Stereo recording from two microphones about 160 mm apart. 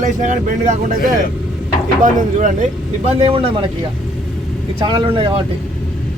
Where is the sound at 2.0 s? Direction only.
55° right (ahead or behind).